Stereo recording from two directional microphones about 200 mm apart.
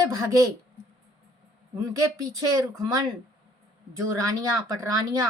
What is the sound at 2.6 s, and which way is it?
Speech, 20° right (ahead or behind).